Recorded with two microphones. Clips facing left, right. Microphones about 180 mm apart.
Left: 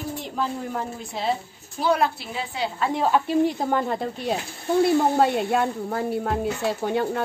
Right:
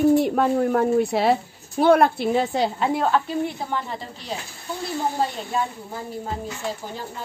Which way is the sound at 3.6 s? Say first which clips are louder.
Left 5 dB; 50° left (ahead or behind).